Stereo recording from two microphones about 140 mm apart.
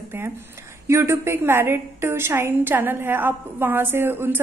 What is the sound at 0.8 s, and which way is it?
A woman's voice, 20° right (ahead or behind).